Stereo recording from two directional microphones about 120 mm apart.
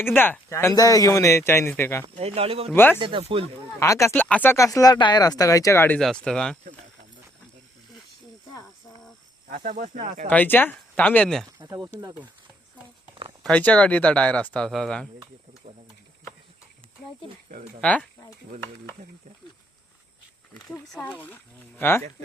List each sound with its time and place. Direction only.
0.0 s speech: 15° left (ahead or behind)
2.1 s speech: 60° right (ahead or behind)
2.7 s speech: 15° left (ahead or behind)
3.0 s speech: 45° right (ahead or behind)
3.8 s speech: 25° left (ahead or behind)
4.1 s speech: 10° left (ahead or behind)
4.5 s speech: 30° left (ahead or behind)
6.0 s speech: 5° left (ahead or behind)
9.8 s speech: 90° right
10.2 s speech: 15° left (ahead or behind)
11.6 s speech: 25° right (ahead or behind)
13.4 s speech: 10° left (ahead or behind)
17.7 s speech: 10° left (ahead or behind)
21.0 s speech: 15° left (ahead or behind)